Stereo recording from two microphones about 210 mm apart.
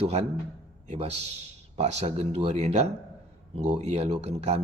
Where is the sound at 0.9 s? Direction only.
30° right (ahead or behind).